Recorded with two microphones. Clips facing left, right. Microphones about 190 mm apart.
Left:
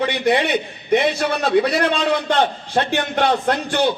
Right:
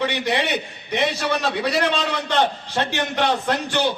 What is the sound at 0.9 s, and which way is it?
A man's voice, 55° left (ahead or behind).